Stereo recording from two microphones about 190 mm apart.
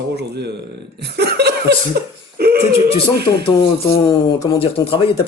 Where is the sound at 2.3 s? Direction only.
55° right (ahead or behind).